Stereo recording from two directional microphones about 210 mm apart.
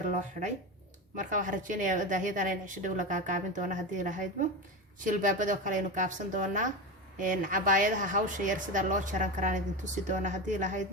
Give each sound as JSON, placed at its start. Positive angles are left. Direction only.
{"t": 0.1, "sound": "speech", "side_deg": -35}